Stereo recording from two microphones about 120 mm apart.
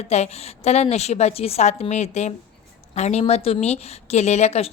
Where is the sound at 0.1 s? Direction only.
65° left (ahead or behind).